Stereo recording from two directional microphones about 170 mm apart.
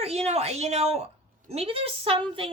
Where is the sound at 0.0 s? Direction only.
40° right (ahead or behind).